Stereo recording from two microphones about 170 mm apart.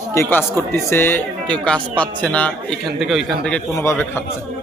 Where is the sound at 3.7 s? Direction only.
15° left (ahead or behind).